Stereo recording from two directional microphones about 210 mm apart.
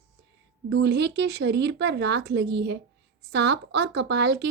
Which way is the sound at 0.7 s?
55° right (ahead or behind).